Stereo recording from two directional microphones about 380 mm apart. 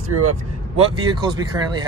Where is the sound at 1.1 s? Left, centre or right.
Centre.